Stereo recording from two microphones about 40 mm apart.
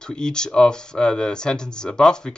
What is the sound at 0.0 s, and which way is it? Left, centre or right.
Speech, centre.